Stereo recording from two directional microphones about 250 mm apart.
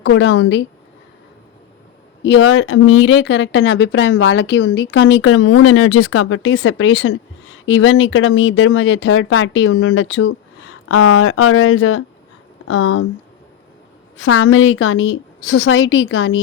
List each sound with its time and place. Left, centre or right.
0.0 s speech: left
2.2 s speech: left
14.2 s speech: left